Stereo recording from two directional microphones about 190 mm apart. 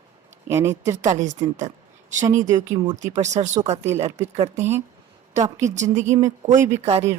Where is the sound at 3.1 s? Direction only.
35° right (ahead or behind).